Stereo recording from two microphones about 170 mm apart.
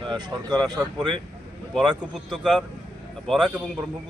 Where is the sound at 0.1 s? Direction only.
25° right (ahead or behind).